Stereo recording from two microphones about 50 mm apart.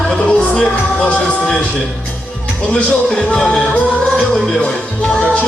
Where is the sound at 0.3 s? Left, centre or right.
Centre.